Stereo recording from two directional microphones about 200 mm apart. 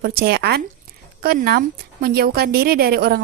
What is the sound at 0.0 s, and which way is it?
A woman's voice, 50° right (ahead or behind).